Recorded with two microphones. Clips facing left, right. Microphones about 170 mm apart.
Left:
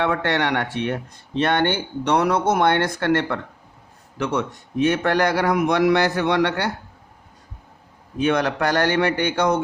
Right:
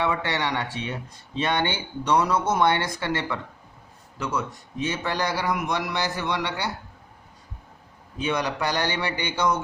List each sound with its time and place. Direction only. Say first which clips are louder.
0.0 s speech: left 4 dB; 55° left (ahead or behind)
4.2 s a man's voice: left 5 dB; 70° left (ahead or behind)
8.2 s speech: left 6 dB; 60° left (ahead or behind)